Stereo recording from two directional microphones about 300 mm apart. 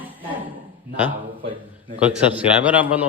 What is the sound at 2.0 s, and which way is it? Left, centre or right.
Speech, centre.